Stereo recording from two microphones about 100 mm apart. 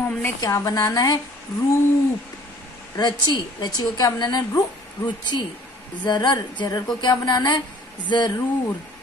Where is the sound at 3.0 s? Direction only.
45° left (ahead or behind).